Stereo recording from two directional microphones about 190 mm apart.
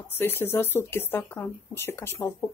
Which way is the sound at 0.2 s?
10° left (ahead or behind).